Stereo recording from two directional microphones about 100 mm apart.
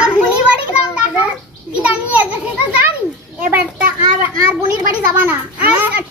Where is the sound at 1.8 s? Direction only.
15° right (ahead or behind).